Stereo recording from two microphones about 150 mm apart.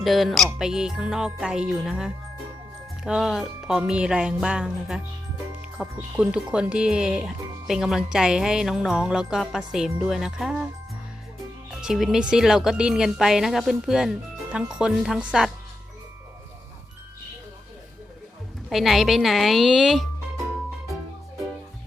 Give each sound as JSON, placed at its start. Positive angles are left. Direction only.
{"t": 0.0, "sound": "speech", "side_deg": 0}
{"t": 11.8, "sound": "speech", "side_deg": -5}
{"t": 18.7, "sound": "speech", "side_deg": 0}